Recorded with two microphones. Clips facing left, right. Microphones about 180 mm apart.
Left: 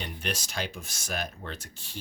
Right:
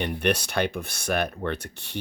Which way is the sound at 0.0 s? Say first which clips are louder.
Right 10 dB; 60° right (ahead or behind).